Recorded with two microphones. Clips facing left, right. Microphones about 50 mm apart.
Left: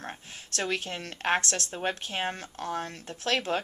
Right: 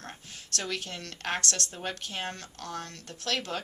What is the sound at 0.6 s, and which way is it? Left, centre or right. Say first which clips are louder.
A woman's voice: left 5 dB; left.